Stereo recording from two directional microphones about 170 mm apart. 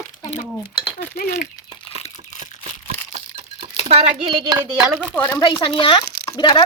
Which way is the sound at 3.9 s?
35° right (ahead or behind).